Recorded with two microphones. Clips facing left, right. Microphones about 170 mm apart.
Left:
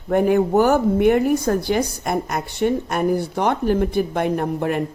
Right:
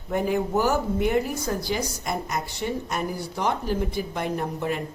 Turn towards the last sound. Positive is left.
turn(degrees=55)  # may be behind; listen again after turning